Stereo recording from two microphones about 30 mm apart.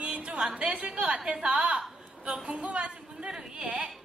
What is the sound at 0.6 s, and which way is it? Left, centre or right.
A woman's voice, right.